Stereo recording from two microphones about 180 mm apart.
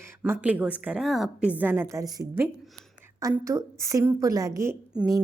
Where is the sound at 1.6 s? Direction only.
15° right (ahead or behind).